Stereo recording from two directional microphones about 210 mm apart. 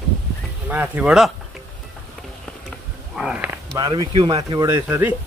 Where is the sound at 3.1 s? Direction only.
5° right (ahead or behind).